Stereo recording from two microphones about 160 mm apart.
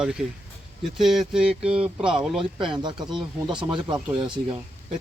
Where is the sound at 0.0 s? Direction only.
5° right (ahead or behind).